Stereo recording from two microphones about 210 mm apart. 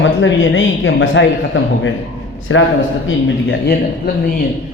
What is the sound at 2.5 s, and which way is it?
Speech, 70° left (ahead or behind).